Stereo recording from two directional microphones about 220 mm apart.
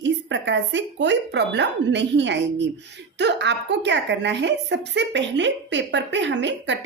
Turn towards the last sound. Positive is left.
turn(degrees=-55)  # may be behind; listen again after turning